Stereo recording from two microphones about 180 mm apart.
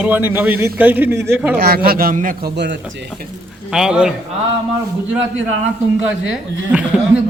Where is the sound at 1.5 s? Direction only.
60° right (ahead or behind).